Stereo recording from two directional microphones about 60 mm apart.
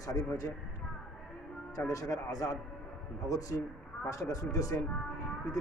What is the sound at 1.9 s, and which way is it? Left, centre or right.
A man's voice, left.